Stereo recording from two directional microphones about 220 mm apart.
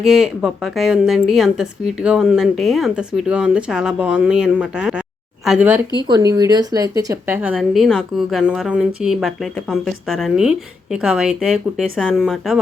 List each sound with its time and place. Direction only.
0.0 s a woman's voice: centre (ahead or behind)
6.0 s a woman's voice: 20° right (ahead or behind)
7.5 s a woman's voice: centre (ahead or behind)